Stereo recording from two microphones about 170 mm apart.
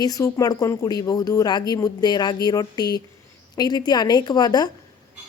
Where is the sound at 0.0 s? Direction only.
20° left (ahead or behind).